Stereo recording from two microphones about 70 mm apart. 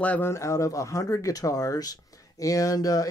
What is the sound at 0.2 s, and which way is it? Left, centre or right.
Speech, left.